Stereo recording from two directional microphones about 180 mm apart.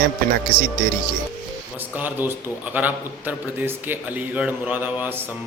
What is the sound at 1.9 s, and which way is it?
A man's voice, 10° right (ahead or behind).